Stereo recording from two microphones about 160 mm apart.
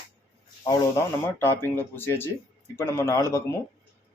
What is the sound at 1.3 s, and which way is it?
Speech, 15° left (ahead or behind).